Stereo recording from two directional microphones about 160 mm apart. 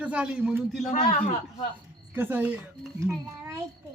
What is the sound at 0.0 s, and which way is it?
Speech, 5° right (ahead or behind).